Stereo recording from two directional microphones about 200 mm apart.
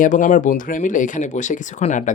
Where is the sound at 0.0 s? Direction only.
40° left (ahead or behind).